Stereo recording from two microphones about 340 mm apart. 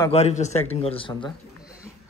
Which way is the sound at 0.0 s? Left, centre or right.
Centre.